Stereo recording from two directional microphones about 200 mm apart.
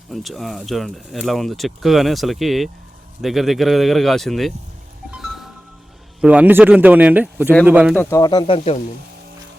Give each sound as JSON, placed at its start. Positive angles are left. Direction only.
{"t": 0.1, "sound": "speech", "side_deg": 0}
{"t": 5.1, "sound": "music", "side_deg": 0}
{"t": 6.2, "sound": "speech", "side_deg": -10}
{"t": 7.9, "sound": "speech", "side_deg": 15}